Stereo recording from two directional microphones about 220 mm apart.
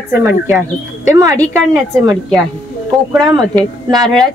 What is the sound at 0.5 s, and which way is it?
Speech, 10° right (ahead or behind).